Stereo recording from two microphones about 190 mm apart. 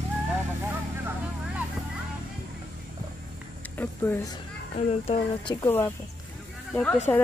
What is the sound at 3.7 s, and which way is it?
Vehicle, 10° left (ahead or behind).